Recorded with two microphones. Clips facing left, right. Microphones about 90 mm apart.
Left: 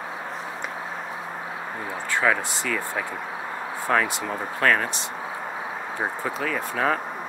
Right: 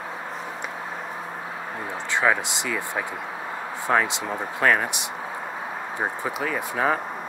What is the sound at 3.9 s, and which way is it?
Speech, 15° right (ahead or behind).